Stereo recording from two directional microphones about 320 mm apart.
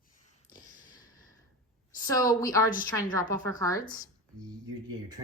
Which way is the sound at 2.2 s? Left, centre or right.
Centre.